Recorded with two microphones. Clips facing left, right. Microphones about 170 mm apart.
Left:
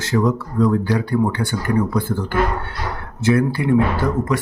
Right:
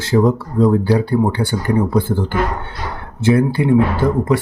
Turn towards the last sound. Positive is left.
turn(degrees=-30)  # may be behind; listen again after turning